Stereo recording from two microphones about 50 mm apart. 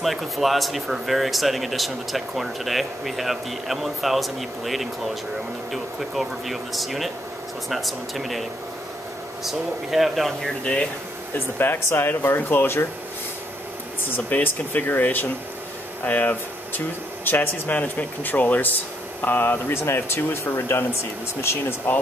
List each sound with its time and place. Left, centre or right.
0.0 s speech: centre
10.6 s speech: left
11.3 s speech: left
14.1 s speech: left
21.4 s speech: left